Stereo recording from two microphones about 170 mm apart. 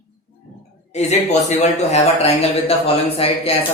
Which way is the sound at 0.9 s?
40° left (ahead or behind).